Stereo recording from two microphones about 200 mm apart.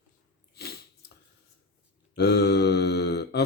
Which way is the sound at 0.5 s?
55° left (ahead or behind).